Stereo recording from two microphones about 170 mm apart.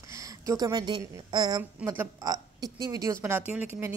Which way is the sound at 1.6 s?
10° right (ahead or behind).